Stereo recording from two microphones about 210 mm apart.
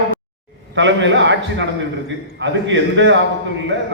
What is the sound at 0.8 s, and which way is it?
A man's voice, 60° right (ahead or behind).